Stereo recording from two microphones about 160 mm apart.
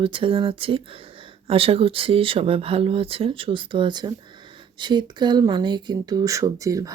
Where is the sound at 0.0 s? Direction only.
30° right (ahead or behind).